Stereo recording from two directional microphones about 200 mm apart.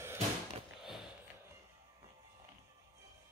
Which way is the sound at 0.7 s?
Centre (ahead or behind).